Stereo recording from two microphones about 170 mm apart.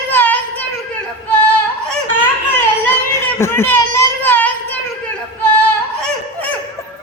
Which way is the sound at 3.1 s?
15° left (ahead or behind).